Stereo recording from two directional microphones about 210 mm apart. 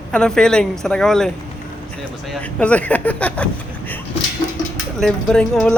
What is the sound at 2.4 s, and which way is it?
Speech, 5° left (ahead or behind).